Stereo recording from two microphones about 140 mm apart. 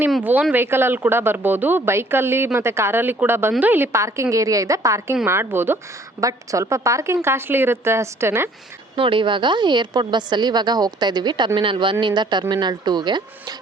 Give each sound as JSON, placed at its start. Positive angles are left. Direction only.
{"t": 0.2, "sound": "a woman's voice", "side_deg": -10}
{"t": 9.0, "sound": "a woman's voice", "side_deg": -35}